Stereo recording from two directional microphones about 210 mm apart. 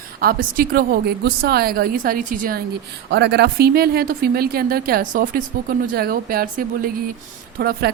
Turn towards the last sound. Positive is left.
turn(degrees=-45)  # may be behind; listen again after turning